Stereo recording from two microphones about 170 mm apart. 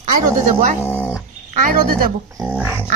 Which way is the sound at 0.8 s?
10° left (ahead or behind).